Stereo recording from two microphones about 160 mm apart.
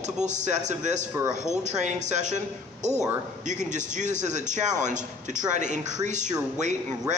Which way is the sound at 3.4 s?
50° right (ahead or behind).